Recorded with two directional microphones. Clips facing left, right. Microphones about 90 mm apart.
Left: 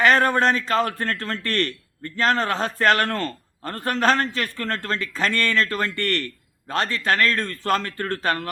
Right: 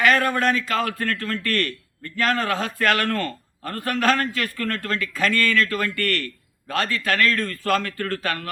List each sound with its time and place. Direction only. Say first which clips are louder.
0.0 s a man's voice: left 2 dB; 30° left (ahead or behind)